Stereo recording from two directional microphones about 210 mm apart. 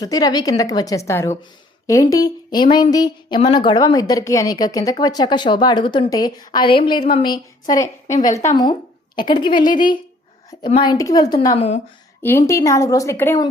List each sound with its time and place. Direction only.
0.0 s a woman's voice: 15° left (ahead or behind)
12.5 s a woman's voice: 15° left (ahead or behind)